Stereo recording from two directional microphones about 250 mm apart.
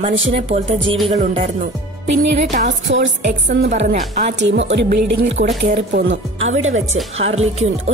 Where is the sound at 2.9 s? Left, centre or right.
Right.